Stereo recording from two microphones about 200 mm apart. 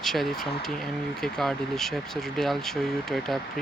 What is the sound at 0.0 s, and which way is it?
Speech, centre (ahead or behind).